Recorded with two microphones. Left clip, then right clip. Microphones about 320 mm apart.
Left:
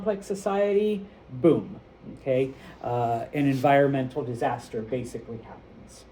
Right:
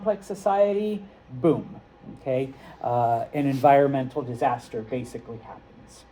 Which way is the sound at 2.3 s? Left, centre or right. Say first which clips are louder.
Left 1 dB; centre.